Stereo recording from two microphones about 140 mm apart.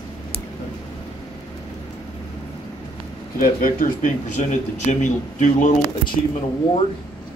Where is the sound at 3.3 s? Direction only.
75° left (ahead or behind).